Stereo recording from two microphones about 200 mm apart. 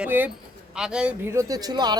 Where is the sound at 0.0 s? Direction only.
10° right (ahead or behind).